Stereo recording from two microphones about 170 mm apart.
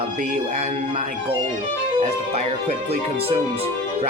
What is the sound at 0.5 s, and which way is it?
Speech, 40° right (ahead or behind).